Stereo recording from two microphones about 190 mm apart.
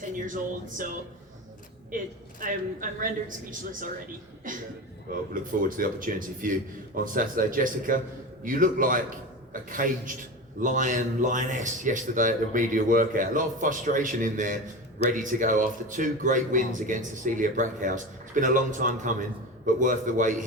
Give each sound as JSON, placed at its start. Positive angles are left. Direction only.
{"t": 0.2, "sound": "a man's voice", "side_deg": -45}
{"t": 2.4, "sound": "a man's voice", "side_deg": -45}